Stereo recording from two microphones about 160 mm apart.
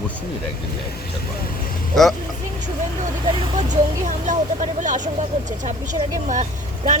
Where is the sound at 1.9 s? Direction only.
Centre (ahead or behind).